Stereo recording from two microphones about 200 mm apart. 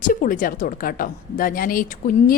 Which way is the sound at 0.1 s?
45° left (ahead or behind).